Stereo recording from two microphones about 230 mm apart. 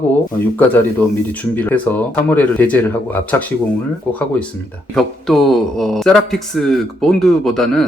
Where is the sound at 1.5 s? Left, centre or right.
Centre.